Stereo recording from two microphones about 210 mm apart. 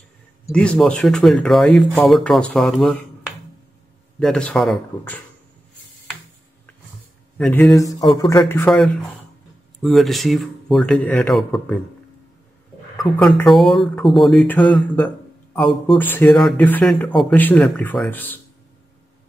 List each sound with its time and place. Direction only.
0.5 s speech: 5° left (ahead or behind)
4.2 s speech: 5° left (ahead or behind)
7.3 s a man's voice: 5° left (ahead or behind)
12.9 s a man's voice: centre (ahead or behind)